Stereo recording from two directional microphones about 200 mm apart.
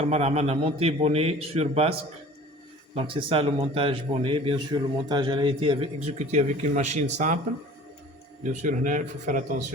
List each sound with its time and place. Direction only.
0.0 s a man's voice: 35° right (ahead or behind)
8.4 s a man's voice: 40° right (ahead or behind)